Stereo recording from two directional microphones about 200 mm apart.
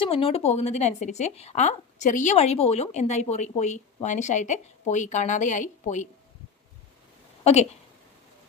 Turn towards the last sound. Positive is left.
turn(degrees=30)  # may be behind; listen again after turning